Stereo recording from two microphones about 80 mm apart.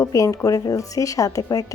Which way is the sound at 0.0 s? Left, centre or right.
Left.